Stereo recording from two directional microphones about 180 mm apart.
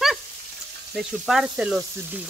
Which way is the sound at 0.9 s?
Centre (ahead or behind).